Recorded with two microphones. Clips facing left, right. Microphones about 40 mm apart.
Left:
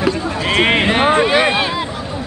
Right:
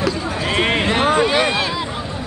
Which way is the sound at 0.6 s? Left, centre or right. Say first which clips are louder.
Left 4 dB; left.